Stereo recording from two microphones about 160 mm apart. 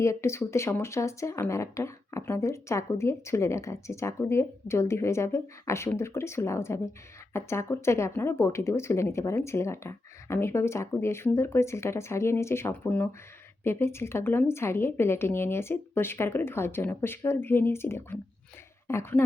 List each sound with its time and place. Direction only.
0.0 s speech: 15° left (ahead or behind)